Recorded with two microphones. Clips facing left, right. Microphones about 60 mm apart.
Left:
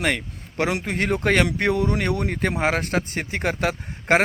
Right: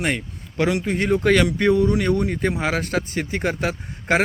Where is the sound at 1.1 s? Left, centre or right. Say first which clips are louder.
Right 3 dB; left.